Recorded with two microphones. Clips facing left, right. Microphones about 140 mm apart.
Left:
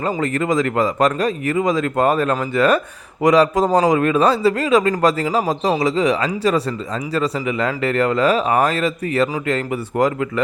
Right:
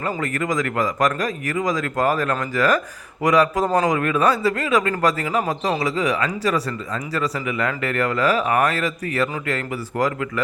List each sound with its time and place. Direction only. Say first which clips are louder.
0.0 s speech: left 4 dB; 30° left (ahead or behind)